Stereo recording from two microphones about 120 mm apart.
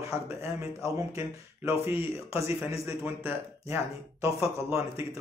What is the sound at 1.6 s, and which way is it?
Speech, 20° right (ahead or behind).